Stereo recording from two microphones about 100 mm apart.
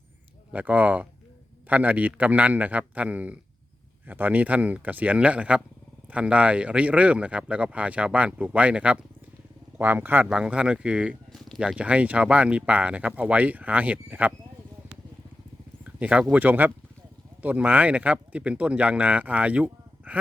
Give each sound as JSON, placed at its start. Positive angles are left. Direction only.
{"t": 0.5, "sound": "speech", "side_deg": -15}
{"t": 11.3, "sound": "a sound", "side_deg": 0}
{"t": 11.6, "sound": "speech", "side_deg": -10}
{"t": 16.0, "sound": "speech", "side_deg": -15}